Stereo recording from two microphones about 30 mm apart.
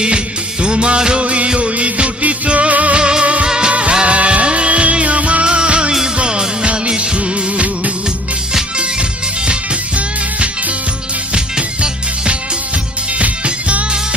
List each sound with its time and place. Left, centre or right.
0.6 s music: right
1.2 s music: right
3.0 s music: right
3.7 s music: right
5.5 s music: right
11.3 s music: right
13.4 s music: right